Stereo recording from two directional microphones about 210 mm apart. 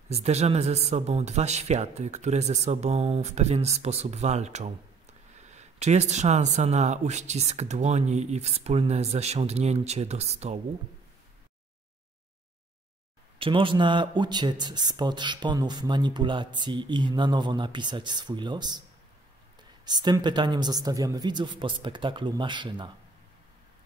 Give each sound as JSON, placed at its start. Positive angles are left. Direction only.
{"t": 0.1, "sound": "speech", "side_deg": -30}
{"t": 13.4, "sound": "speech", "side_deg": -25}
{"t": 19.8, "sound": "speech", "side_deg": -20}